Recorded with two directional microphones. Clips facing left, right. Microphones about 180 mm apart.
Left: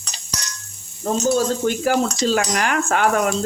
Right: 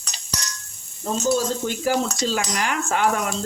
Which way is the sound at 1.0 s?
55° left (ahead or behind).